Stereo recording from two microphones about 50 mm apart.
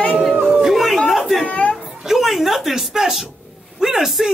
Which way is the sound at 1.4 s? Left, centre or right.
Left.